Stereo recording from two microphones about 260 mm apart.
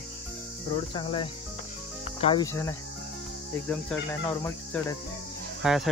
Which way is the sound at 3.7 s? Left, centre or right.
Centre.